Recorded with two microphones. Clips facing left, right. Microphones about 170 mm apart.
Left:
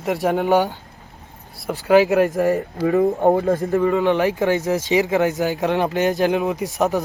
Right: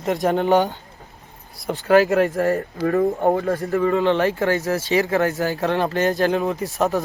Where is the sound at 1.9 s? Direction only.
10° left (ahead or behind).